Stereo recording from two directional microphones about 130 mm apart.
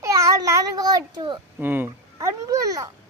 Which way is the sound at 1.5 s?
15° right (ahead or behind).